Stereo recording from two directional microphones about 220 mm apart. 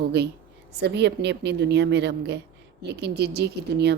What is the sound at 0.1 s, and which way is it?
A woman's voice, 50° right (ahead or behind).